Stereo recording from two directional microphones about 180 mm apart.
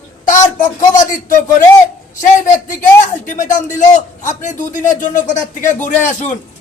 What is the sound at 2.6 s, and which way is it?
A man's voice, 45° left (ahead or behind).